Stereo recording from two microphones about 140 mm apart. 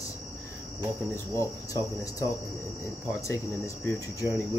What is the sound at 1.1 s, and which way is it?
Speech, 20° left (ahead or behind).